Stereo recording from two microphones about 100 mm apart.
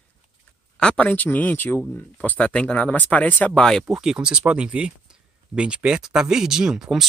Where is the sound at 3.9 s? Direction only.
5° right (ahead or behind).